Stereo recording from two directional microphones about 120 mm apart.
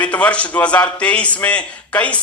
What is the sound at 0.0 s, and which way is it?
A man's voice, 10° left (ahead or behind).